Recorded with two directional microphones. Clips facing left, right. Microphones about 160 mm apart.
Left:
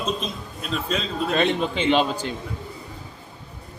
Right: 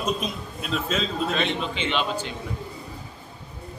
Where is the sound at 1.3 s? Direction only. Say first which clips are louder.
Left 5 dB; 45° left (ahead or behind).